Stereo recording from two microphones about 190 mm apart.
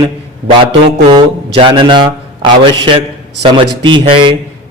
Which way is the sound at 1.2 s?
25° right (ahead or behind).